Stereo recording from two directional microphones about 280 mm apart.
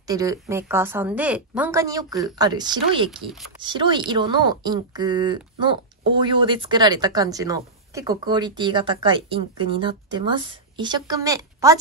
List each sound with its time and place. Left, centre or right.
0.0 s speech: centre